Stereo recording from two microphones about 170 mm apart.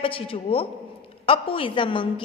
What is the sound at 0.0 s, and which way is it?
A man's voice, 30° left (ahead or behind).